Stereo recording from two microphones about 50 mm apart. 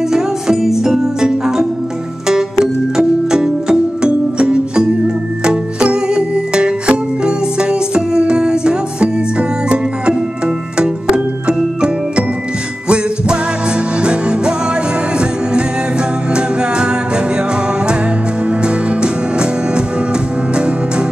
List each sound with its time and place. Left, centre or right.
0.1 s music: centre
16.3 s music: centre
18.5 s music: right